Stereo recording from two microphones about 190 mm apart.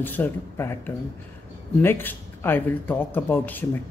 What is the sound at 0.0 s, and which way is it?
Speech, 10° left (ahead or behind).